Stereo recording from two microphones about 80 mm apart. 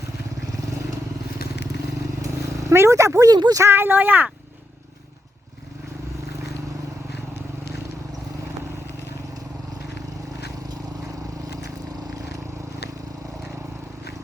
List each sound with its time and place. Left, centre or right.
2.2 s vehicle: right
3.3 s speech: right
3.6 s speech: right